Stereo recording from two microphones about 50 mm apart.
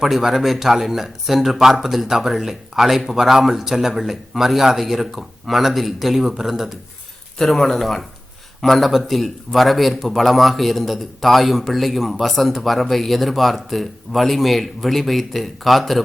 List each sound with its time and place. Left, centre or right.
0.0 s speech: centre
7.3 s speech: centre